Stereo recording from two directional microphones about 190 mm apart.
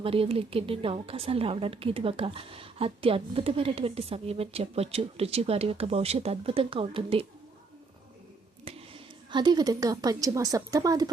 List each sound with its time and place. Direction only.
0.0 s a woman's voice: 30° right (ahead or behind)
8.6 s a woman's voice: 25° right (ahead or behind)